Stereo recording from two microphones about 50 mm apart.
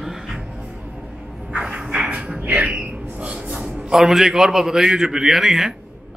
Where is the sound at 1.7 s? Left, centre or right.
Centre.